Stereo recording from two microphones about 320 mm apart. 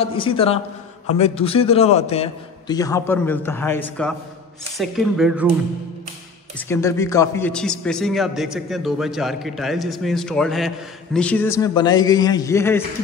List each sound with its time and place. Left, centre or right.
0.0 s a man's voice: centre
6.7 s a man's voice: centre